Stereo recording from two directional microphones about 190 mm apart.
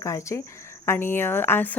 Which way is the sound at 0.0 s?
15° left (ahead or behind).